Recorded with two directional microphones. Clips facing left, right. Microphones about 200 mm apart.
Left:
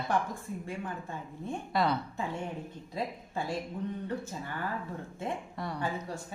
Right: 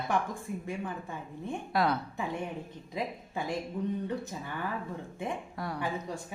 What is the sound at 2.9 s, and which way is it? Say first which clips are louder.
Speech: even; 20° right (ahead or behind).